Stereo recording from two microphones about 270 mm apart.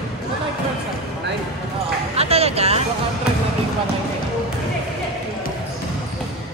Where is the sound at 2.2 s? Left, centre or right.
Right.